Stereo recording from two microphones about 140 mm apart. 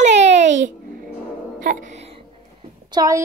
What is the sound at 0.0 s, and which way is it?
Babbling, 55° right (ahead or behind).